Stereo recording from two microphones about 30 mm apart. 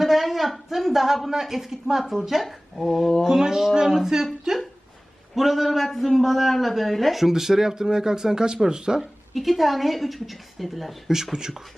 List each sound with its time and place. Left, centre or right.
0.0 s speech: centre
3.2 s speech: centre
5.3 s speech: centre
7.2 s speech: centre
9.0 s speech: centre
11.1 s speech: centre